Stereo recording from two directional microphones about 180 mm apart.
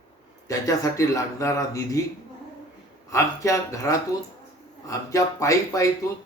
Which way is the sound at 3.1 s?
15° left (ahead or behind).